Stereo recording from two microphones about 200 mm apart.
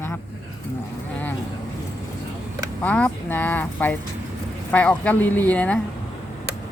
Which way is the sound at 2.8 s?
5° left (ahead or behind).